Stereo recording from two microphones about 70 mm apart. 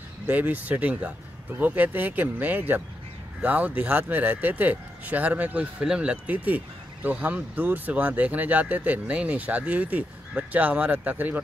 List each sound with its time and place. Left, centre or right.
0.3 s speech: right
6.3 s speech: right